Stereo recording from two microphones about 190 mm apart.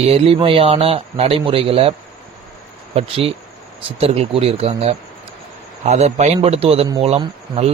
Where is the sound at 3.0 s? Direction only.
30° right (ahead or behind).